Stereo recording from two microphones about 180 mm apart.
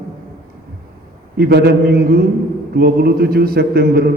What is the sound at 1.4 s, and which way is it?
A man's voice, 65° right (ahead or behind).